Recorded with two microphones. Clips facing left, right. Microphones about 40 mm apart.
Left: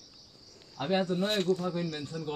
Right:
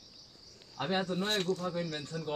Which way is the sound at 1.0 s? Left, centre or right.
Centre.